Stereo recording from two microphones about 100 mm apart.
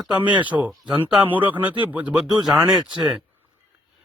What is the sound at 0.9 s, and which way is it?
Speech, 55° right (ahead or behind).